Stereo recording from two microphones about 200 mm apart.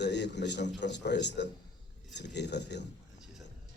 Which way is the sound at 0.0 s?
60° left (ahead or behind).